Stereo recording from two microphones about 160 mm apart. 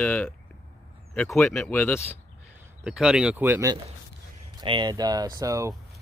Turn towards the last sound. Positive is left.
turn(degrees=-20)  # may be behind; listen again after turning